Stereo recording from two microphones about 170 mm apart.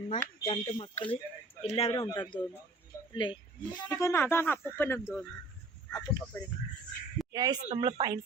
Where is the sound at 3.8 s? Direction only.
20° left (ahead or behind).